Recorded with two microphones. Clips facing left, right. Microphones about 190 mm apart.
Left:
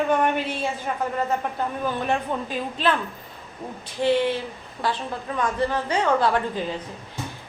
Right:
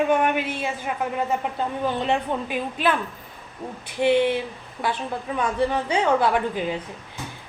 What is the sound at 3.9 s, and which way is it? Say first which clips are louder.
A man's voice: right 2 dB; 15° right (ahead or behind).